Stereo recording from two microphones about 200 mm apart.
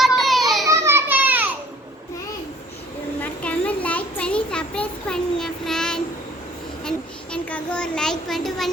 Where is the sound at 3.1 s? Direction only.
5° left (ahead or behind).